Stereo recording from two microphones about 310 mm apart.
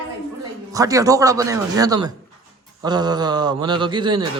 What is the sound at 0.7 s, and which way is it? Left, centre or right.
A man's voice, centre.